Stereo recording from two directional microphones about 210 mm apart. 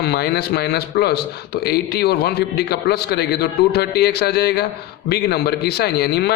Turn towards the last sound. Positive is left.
turn(degrees=50)  # may be behind; listen again after turning